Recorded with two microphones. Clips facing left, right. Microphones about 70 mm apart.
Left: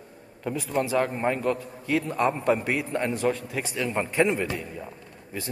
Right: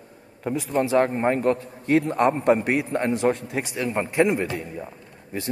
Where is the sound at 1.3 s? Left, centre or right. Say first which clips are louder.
Right 4 dB; right.